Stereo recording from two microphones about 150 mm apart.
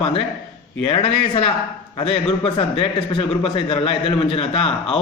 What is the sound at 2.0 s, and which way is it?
A man's voice, 35° left (ahead or behind).